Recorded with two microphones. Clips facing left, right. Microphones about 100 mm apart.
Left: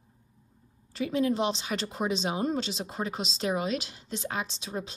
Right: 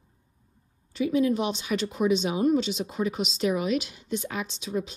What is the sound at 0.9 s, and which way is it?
A woman's voice, 40° left (ahead or behind).